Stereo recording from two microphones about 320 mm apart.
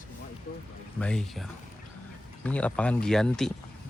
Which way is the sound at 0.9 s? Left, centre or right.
Centre.